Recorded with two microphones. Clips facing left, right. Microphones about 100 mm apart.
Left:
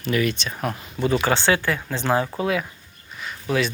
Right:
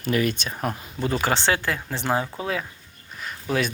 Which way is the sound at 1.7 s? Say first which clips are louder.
Left 3 dB; 25° right (ahead or behind).